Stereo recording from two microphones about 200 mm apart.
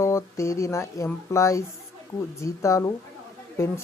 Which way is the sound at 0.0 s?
15° left (ahead or behind).